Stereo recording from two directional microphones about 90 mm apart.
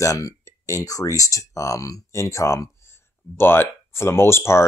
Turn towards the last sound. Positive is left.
turn(degrees=30)  # may be behind; listen again after turning